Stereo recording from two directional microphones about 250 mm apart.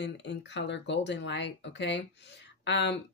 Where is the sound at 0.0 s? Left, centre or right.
Left.